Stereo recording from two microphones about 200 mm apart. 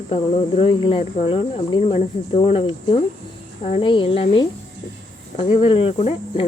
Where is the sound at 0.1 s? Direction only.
30° left (ahead or behind).